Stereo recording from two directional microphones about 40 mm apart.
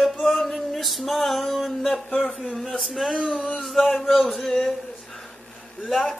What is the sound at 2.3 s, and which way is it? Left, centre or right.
Speech, centre.